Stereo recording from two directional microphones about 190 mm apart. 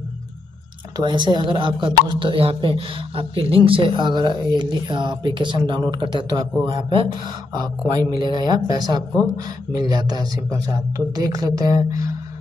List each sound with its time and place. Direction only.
0.9 s speech: 25° right (ahead or behind)